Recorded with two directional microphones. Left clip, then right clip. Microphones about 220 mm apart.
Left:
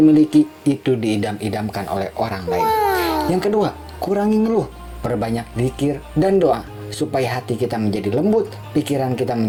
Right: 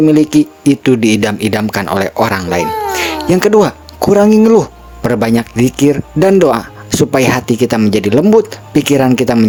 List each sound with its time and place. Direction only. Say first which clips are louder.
0.0 s speech: right 4 dB; 40° right (ahead or behind)
2.6 s a sound: right 1 dB; centre (ahead or behind)
3.2 s speech: right 9 dB; 40° right (ahead or behind)